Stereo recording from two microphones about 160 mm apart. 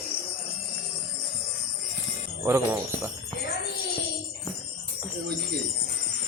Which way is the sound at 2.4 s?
15° right (ahead or behind).